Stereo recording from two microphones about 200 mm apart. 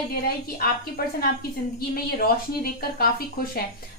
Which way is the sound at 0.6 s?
45° left (ahead or behind).